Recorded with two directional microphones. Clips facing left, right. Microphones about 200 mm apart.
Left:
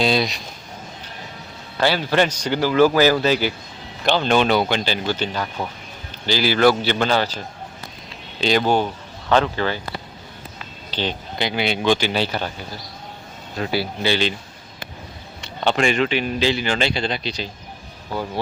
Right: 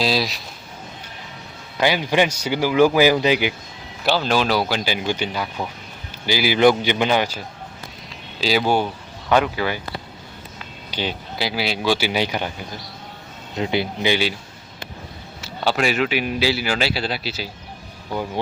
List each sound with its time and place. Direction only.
0.0 s a man's voice: centre (ahead or behind)
1.8 s a man's voice: 15° right (ahead or behind)
4.0 s a man's voice: 5° right (ahead or behind)
10.9 s a man's voice: 10° right (ahead or behind)
13.6 s a man's voice: 20° right (ahead or behind)
15.4 s a man's voice: 5° right (ahead or behind)